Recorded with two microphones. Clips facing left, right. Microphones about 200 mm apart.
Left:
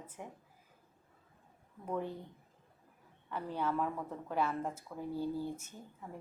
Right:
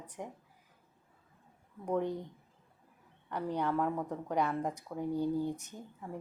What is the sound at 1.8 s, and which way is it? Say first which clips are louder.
Speech: right 5 dB; 15° right (ahead or behind).